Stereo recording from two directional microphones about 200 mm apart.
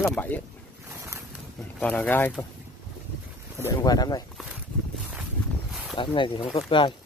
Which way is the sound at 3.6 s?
20° left (ahead or behind).